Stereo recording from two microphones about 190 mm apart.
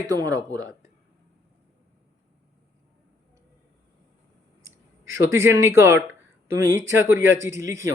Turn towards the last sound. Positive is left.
turn(degrees=-15)  # may be behind; listen again after turning